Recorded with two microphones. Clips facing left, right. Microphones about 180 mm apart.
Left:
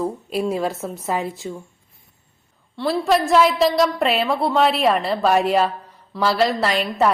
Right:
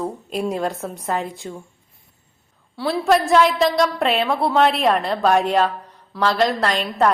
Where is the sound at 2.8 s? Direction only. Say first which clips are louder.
Right 1 dB; centre (ahead or behind).